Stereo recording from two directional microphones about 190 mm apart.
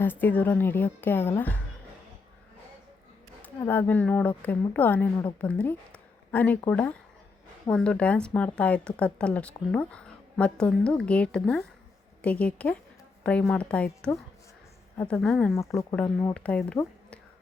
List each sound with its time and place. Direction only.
0.0 s a woman's voice: 10° left (ahead or behind)
3.4 s a woman's voice: 10° left (ahead or behind)
15.5 s a woman's voice: 15° left (ahead or behind)